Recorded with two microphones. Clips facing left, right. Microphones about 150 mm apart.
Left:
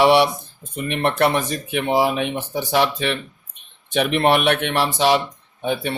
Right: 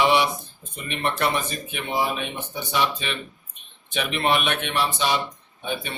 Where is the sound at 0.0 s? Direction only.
70° left (ahead or behind).